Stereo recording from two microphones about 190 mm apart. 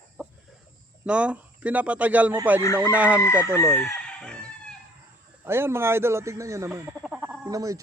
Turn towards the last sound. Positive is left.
turn(degrees=-15)  # may be behind; listen again after turning